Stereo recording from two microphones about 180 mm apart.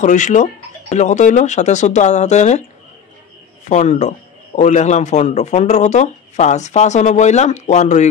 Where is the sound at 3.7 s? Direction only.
40° left (ahead or behind).